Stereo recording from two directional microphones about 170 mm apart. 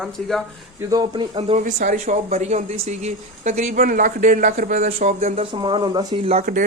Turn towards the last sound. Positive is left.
turn(degrees=-35)  # may be behind; listen again after turning